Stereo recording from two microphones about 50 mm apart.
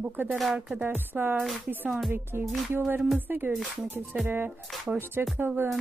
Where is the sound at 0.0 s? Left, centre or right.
Right.